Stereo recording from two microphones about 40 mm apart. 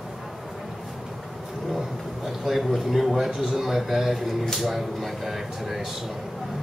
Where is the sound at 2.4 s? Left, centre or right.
Centre.